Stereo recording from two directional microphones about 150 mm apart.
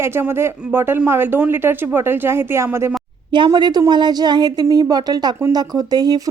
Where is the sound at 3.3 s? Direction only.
30° right (ahead or behind).